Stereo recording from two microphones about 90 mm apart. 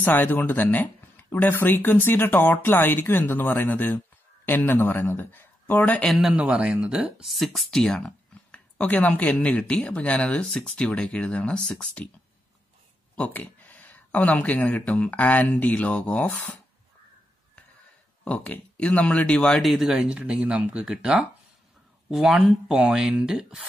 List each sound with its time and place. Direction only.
0.0 s speech: 20° left (ahead or behind)
6.1 s speech: 10° right (ahead or behind)
7.3 s speech: centre (ahead or behind)
8.5 s speech: 15° left (ahead or behind)
13.1 s speech: 15° left (ahead or behind)
18.2 s speech: 15° left (ahead or behind); by 21.3 s 10° right (ahead or behind)
22.1 s speech: centre (ahead or behind)